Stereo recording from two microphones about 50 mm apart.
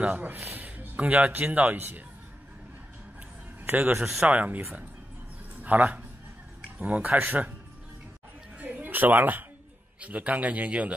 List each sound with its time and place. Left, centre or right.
0.0 s speech: right
0.5 s a sound: right
1.4 s speech: right
3.6 s a man's voice: right
5.6 s a man's voice: right
8.5 s a sound: right
9.9 s a man's voice: right